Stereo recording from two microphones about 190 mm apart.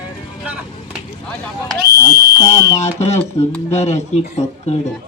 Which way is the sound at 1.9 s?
60° right (ahead or behind).